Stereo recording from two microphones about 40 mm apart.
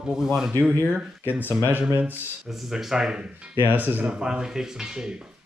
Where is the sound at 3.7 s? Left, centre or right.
Right.